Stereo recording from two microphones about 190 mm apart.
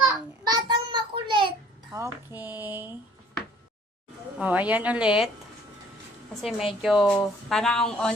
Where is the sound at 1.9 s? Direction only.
15° right (ahead or behind).